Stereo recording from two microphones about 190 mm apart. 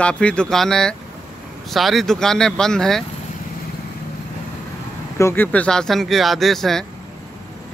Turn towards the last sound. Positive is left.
turn(degrees=0)  # may be behind; listen again after turning